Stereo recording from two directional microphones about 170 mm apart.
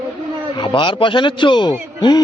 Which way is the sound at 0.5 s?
30° left (ahead or behind).